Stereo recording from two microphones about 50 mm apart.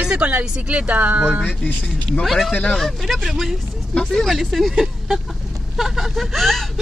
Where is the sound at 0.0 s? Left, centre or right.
Centre.